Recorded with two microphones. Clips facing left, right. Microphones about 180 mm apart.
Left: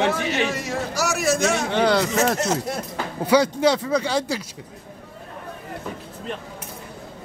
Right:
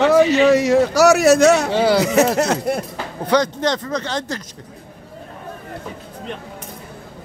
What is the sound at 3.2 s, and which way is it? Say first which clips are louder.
Speech: even; 10° left (ahead or behind).